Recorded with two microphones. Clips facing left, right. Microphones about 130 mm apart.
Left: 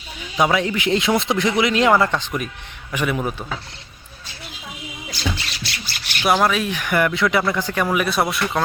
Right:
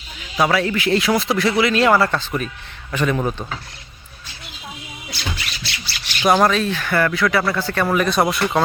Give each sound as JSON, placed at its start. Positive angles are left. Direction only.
{"t": 0.3, "sound": "a man's voice", "side_deg": 20}
{"t": 5.1, "sound": "beatboxing", "side_deg": 40}
{"t": 6.2, "sound": "speech", "side_deg": 5}
{"t": 7.9, "sound": "speech", "side_deg": 5}